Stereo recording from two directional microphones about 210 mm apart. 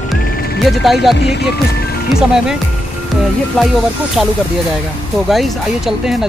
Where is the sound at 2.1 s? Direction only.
5° right (ahead or behind).